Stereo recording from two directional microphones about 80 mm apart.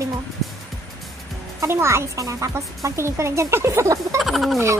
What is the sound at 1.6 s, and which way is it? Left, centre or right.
Speech, right.